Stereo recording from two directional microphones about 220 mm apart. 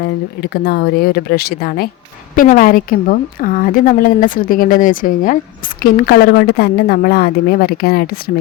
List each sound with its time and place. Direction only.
0.0 s a woman's voice: 45° left (ahead or behind)